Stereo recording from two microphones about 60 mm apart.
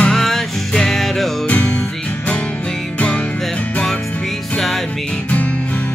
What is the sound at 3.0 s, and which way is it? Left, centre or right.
Music, centre.